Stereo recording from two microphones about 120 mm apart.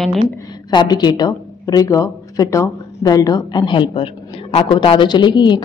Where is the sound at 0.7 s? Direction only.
40° left (ahead or behind).